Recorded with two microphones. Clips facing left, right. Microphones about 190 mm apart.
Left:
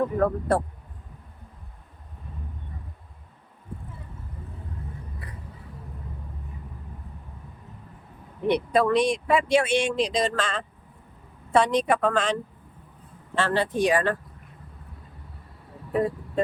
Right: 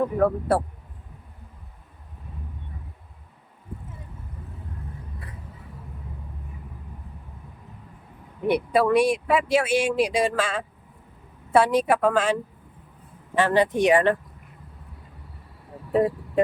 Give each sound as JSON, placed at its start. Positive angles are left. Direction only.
{"t": 0.2, "sound": "speech", "side_deg": -5}
{"t": 8.4, "sound": "speech", "side_deg": -5}
{"t": 15.9, "sound": "speech", "side_deg": -20}